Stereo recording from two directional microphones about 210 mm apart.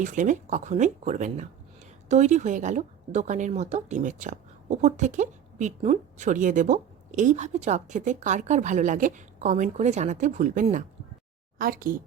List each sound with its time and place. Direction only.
0.0 s a woman's voice: 35° right (ahead or behind)